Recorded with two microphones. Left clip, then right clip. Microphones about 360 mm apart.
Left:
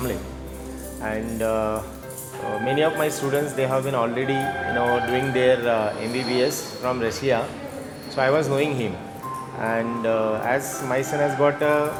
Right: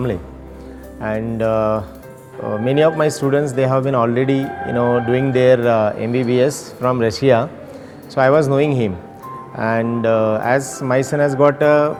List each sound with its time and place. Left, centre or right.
1.0 s speech: right
8.1 s speech: right